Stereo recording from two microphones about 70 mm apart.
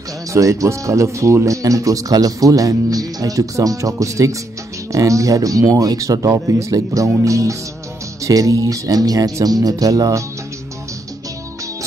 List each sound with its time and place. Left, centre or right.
0.3 s speech: right